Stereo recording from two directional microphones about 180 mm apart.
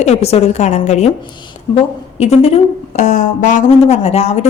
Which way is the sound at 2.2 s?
35° left (ahead or behind).